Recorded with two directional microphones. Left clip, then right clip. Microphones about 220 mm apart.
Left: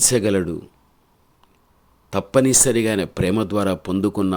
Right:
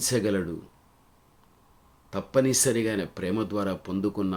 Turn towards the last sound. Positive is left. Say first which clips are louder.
# left 8 dB
turn(degrees=35)  # may be behind; listen again after turning